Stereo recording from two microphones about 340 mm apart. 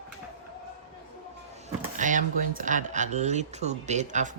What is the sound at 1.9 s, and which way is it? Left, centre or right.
Speech, right.